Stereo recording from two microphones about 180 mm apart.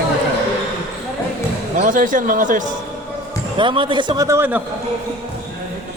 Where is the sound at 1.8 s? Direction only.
50° right (ahead or behind).